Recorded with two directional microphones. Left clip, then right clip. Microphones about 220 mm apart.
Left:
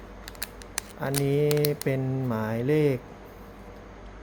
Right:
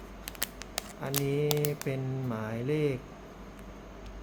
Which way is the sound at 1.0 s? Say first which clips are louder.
Left 6 dB; 15° left (ahead or behind).